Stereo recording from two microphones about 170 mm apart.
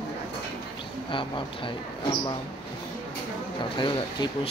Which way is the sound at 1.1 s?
30° left (ahead or behind).